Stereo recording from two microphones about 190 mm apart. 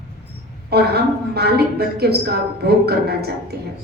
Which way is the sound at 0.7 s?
55° right (ahead or behind).